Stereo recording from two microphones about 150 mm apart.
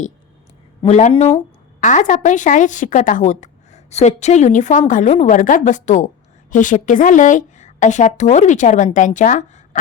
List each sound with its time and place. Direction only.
0.9 s speech: 55° left (ahead or behind)
1.8 s a woman's voice: 55° left (ahead or behind)